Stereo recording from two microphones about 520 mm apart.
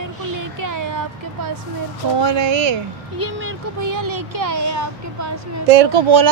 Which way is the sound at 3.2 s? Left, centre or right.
Right.